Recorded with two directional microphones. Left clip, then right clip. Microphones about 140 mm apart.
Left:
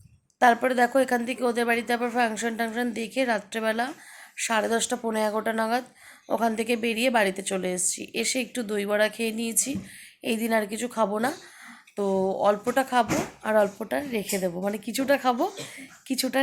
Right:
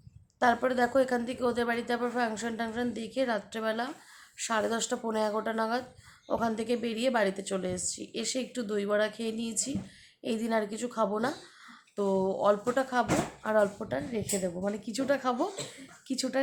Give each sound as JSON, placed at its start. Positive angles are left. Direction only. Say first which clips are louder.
{"t": 0.3, "sound": "speech", "louder": "left 6 dB", "side_deg": 15}